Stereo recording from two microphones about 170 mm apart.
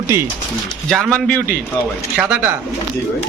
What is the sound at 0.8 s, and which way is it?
Speech, 5° left (ahead or behind).